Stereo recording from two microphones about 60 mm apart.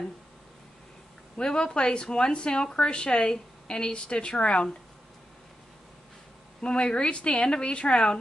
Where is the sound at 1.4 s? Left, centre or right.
Centre.